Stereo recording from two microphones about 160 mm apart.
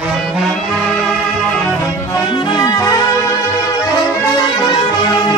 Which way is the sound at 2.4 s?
25° left (ahead or behind).